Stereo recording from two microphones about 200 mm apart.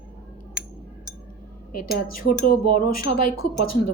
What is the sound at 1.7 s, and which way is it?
Speech, 45° left (ahead or behind).